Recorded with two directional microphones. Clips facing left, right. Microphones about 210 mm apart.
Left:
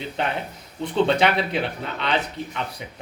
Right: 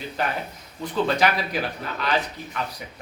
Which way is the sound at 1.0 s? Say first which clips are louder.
Left 2 dB; 25° left (ahead or behind).